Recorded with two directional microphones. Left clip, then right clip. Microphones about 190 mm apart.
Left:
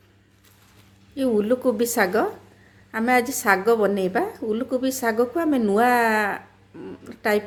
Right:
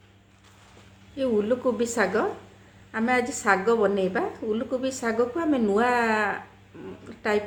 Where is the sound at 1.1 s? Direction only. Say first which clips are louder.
Left 3 dB; 45° left (ahead or behind).